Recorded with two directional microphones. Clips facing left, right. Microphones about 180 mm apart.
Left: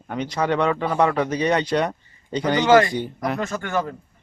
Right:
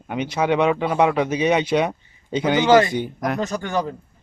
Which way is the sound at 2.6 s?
20° right (ahead or behind).